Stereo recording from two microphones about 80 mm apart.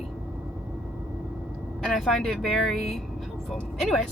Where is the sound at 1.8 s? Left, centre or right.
Centre.